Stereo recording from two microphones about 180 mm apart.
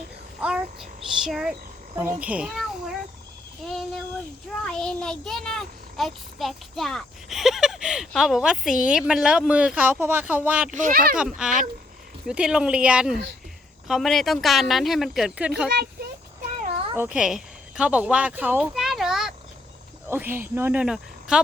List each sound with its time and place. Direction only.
0.4 s speech: 5° right (ahead or behind)
4.6 s a child's voice: 5° left (ahead or behind)
10.8 s speech: 50° right (ahead or behind)
11.3 s a child's voice: 5° right (ahead or behind)
16.9 s speech: 10° right (ahead or behind)